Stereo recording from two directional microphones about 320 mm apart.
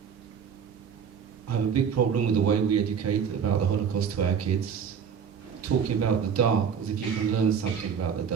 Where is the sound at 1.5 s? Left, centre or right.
Right.